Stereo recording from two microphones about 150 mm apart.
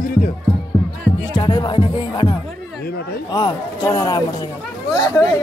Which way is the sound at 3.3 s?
30° left (ahead or behind).